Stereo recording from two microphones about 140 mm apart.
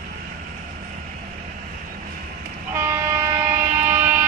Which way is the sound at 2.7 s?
20° right (ahead or behind).